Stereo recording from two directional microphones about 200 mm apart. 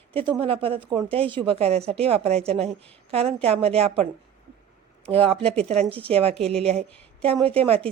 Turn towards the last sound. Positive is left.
turn(degrees=-30)  # may be behind; listen again after turning